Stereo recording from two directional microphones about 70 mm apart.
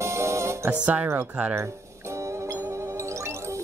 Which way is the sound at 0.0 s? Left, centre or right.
Right.